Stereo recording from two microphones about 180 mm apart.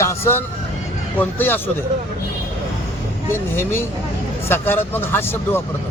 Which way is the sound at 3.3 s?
15° left (ahead or behind).